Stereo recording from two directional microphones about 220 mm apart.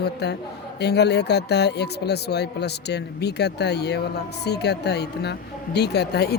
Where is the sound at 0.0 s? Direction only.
50° left (ahead or behind).